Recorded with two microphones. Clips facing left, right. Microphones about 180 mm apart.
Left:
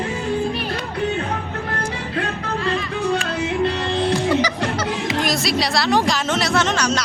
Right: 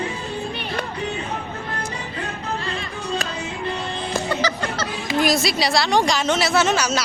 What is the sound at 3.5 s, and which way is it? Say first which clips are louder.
Music: left 10 dB; 80° left.